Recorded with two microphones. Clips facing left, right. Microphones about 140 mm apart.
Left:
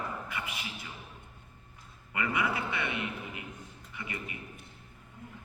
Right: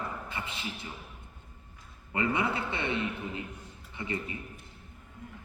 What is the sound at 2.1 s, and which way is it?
A man's voice, 30° right (ahead or behind).